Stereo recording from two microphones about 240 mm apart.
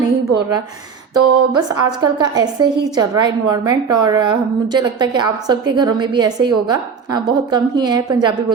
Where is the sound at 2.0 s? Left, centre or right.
Centre.